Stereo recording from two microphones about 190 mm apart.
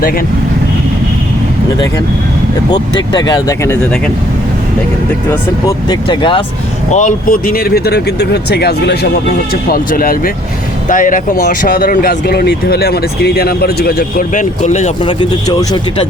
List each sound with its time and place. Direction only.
2.6 s speech: 20° left (ahead or behind)
5.3 s speech: 15° left (ahead or behind)
6.1 s speech: 25° left (ahead or behind)
6.9 s speech: 45° left (ahead or behind)
15.2 s speech: 25° left (ahead or behind)